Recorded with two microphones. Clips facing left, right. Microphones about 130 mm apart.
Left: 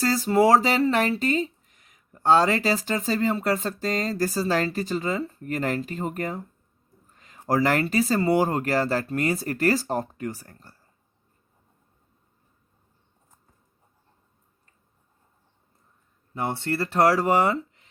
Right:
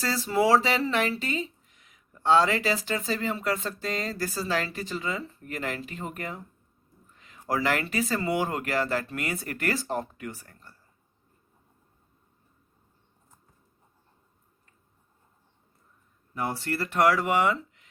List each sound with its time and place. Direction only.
0.0 s speech: 40° left (ahead or behind)
16.3 s speech: 25° left (ahead or behind)